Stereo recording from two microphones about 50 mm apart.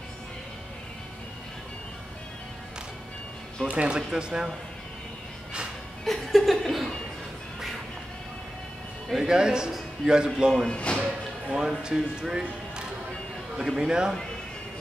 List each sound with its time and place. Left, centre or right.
3.6 s speech: right
3.9 s speech: centre
6.0 s laughter: centre
9.1 s a man's voice: centre
10.7 s speech: left
11.5 s speech: centre